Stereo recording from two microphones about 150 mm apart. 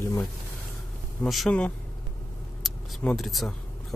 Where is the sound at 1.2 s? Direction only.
Centre (ahead or behind).